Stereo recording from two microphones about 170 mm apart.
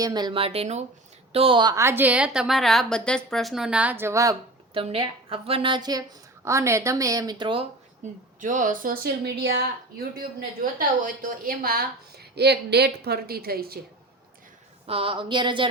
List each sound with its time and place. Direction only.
0.0 s a woman's voice: 25° right (ahead or behind)
4.7 s a woman's voice: 30° right (ahead or behind)
8.0 s a woman's voice: 45° right (ahead or behind); by 9.6 s 80° right
10.2 s a woman's voice: 55° right (ahead or behind)
12.3 s a woman's voice: 75° right (ahead or behind)
14.8 s speech: 35° right (ahead or behind)